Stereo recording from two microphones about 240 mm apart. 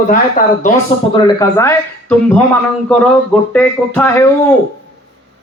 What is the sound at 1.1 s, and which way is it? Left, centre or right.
Speech, centre.